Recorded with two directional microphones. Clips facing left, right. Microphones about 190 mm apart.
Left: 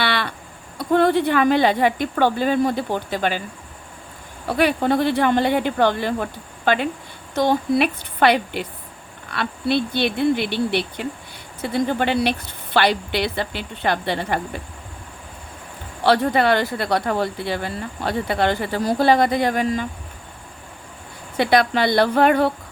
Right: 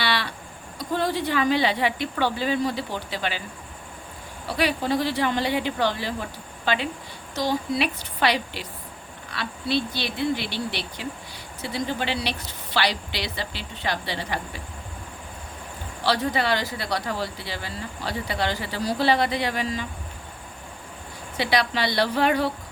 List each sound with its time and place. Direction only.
0.0 s a sound: 55° left (ahead or behind)
0.8 s a woman's voice: 60° left (ahead or behind)
4.4 s a woman's voice: 55° left (ahead or behind)
16.0 s speech: 55° left (ahead or behind)
21.3 s a woman's voice: 50° left (ahead or behind)